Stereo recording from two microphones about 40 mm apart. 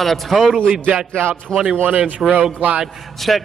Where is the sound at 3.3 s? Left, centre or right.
Centre.